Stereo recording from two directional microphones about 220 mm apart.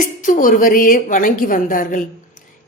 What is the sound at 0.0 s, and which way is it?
A woman's voice, 35° left (ahead or behind).